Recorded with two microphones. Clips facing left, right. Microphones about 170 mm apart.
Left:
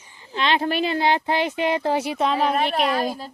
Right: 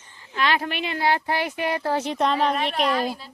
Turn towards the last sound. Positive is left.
turn(degrees=45)  # may be behind; listen again after turning